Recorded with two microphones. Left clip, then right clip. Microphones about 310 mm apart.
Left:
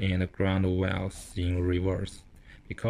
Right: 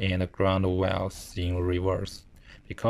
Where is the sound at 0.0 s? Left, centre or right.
Centre.